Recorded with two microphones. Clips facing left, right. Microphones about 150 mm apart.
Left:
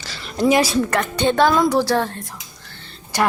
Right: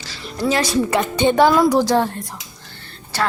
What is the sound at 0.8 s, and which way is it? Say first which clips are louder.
A woman's voice: right 2 dB; 10° right (ahead or behind).